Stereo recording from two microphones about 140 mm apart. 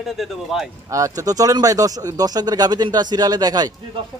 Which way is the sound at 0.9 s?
25° right (ahead or behind).